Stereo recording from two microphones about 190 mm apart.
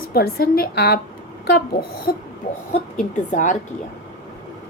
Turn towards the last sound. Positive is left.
turn(degrees=40)  # may be behind; listen again after turning